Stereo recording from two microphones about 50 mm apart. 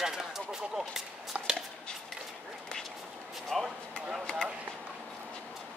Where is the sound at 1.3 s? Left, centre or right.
Right.